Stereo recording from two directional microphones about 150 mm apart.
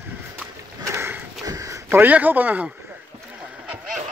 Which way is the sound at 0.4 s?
15° right (ahead or behind).